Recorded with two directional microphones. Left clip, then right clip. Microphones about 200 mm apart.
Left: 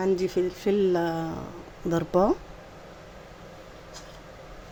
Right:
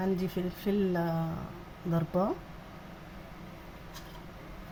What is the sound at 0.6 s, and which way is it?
Speech, 50° left (ahead or behind).